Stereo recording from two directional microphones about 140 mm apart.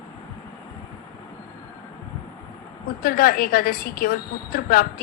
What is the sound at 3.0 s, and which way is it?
A woman's voice, 90° left.